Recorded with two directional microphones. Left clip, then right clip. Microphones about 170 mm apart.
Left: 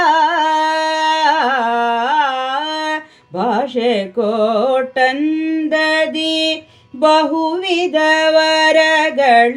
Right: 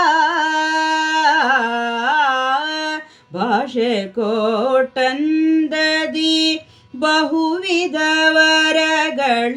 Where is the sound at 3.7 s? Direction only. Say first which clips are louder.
Left 3 dB; 45° right (ahead or behind).